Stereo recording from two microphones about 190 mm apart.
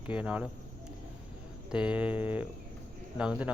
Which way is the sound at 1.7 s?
5° right (ahead or behind).